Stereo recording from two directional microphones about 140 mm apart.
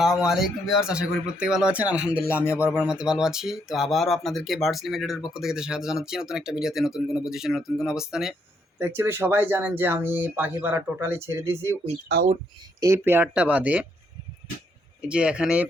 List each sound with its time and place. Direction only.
0.0 s speech: 5° right (ahead or behind)
8.8 s speech: 15° right (ahead or behind)
12.8 s speech: 20° right (ahead or behind)
15.0 s speech: 5° right (ahead or behind)